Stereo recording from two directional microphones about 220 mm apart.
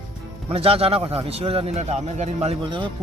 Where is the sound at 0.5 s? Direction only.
25° right (ahead or behind).